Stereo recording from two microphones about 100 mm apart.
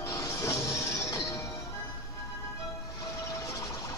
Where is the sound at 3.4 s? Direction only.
30° left (ahead or behind).